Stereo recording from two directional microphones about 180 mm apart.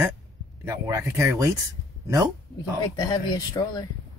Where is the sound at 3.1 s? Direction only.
20° left (ahead or behind).